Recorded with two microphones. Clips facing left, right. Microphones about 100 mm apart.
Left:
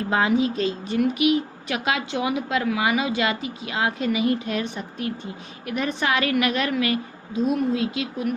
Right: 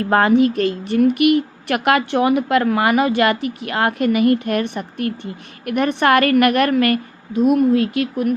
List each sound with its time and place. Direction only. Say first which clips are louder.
0.0 s speech: right 7 dB; 60° right (ahead or behind)